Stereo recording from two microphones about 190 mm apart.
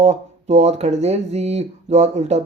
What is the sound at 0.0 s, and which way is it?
Speech, 35° right (ahead or behind).